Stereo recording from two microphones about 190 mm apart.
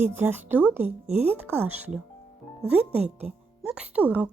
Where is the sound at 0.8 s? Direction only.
35° right (ahead or behind).